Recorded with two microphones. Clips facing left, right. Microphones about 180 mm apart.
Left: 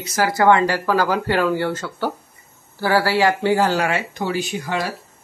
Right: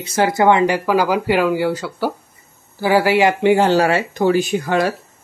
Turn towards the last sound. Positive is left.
turn(degrees=-50)  # may be behind; listen again after turning